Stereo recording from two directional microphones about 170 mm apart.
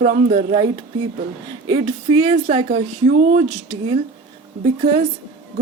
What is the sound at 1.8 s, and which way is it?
Speech, 35° right (ahead or behind).